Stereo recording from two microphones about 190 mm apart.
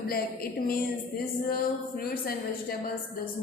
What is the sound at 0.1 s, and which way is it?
A woman's voice, 50° left (ahead or behind).